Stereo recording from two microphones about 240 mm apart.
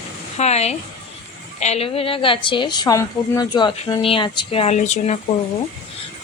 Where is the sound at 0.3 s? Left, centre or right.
Left.